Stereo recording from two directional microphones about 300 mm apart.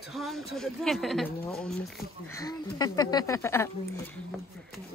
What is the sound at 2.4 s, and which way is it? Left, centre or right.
Speech, centre.